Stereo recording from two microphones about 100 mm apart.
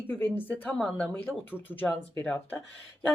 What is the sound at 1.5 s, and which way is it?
Speech, 20° left (ahead or behind).